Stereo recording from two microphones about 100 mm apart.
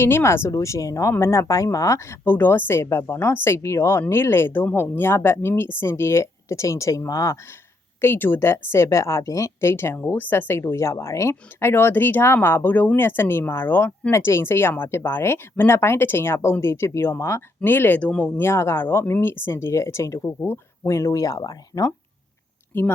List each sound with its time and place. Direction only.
0.0 s a woman's voice: 25° left (ahead or behind)
22.7 s a woman's voice: 20° left (ahead or behind)